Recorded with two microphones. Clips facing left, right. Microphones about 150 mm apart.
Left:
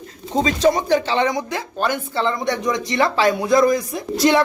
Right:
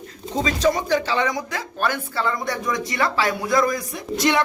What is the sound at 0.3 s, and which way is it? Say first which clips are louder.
Speech: left 4 dB; 25° left (ahead or behind).